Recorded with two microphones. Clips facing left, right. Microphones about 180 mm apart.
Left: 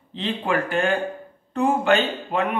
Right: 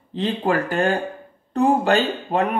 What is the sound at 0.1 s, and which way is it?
Speech, 40° right (ahead or behind).